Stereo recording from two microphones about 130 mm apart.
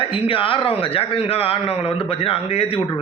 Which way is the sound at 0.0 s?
45° left (ahead or behind).